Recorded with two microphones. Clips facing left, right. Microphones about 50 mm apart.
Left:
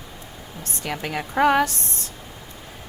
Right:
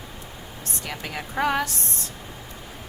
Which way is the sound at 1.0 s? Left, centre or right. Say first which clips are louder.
Left 6 dB; left.